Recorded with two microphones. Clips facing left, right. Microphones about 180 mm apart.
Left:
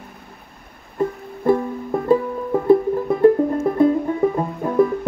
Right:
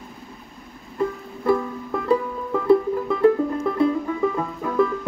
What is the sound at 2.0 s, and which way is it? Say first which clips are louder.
Music: left 4 dB; 45° left (ahead or behind).